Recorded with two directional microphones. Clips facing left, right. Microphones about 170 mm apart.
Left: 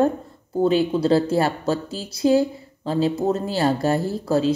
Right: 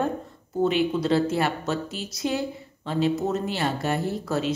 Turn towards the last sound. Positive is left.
turn(degrees=30)  # may be behind; listen again after turning